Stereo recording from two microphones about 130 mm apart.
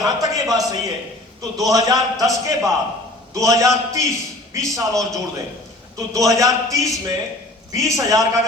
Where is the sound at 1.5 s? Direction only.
25° right (ahead or behind).